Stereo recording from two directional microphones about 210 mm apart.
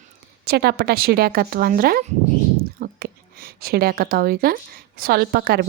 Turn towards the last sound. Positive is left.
turn(degrees=-50)  # may be behind; listen again after turning